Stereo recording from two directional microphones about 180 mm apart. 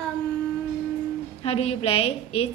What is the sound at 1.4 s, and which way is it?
A woman's voice, 35° left (ahead or behind).